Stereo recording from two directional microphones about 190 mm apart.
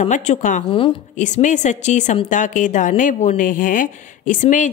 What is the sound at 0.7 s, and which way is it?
Speech, 30° left (ahead or behind).